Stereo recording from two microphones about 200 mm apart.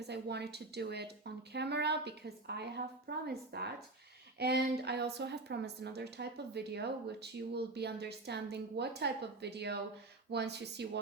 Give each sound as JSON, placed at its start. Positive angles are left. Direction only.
{"t": 0.1, "sound": "speech", "side_deg": -55}
{"t": 4.4, "sound": "a sound", "side_deg": -55}
{"t": 4.9, "sound": "speech", "side_deg": -55}